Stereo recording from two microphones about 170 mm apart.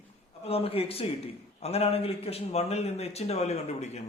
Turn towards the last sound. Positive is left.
turn(degrees=40)  # may be behind; listen again after turning